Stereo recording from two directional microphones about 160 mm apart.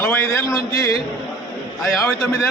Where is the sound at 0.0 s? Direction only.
15° left (ahead or behind).